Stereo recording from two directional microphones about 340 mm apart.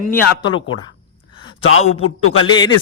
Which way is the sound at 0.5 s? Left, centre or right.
Centre.